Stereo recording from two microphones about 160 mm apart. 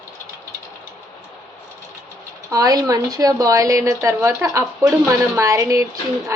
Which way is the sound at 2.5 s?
20° right (ahead or behind).